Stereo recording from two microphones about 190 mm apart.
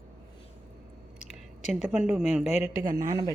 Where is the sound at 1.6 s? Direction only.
Centre (ahead or behind).